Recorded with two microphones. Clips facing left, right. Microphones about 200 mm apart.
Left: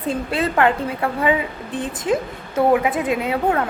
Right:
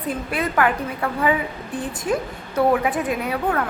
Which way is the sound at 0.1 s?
25° left (ahead or behind).